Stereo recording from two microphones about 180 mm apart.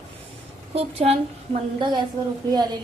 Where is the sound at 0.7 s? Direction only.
35° right (ahead or behind).